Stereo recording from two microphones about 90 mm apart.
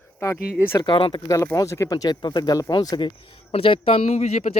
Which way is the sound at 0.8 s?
65° left (ahead or behind).